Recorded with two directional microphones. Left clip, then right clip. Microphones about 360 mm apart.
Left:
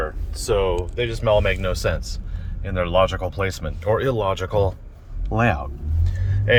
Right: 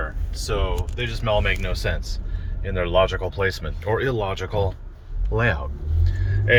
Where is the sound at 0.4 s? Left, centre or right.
Centre.